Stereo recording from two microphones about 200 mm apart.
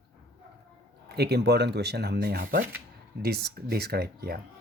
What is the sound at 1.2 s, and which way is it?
Speech, 55° right (ahead or behind).